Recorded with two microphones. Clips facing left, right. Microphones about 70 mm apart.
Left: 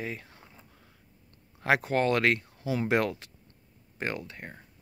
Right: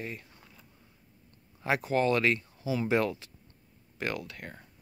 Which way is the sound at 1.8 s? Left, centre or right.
Left.